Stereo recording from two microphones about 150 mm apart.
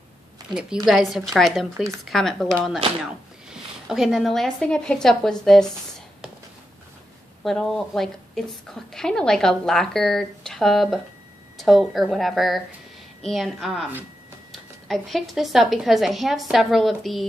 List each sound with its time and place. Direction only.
0.5 s a woman's voice: 30° right (ahead or behind)
0.8 s speech: centre (ahead or behind)
7.4 s speech: centre (ahead or behind)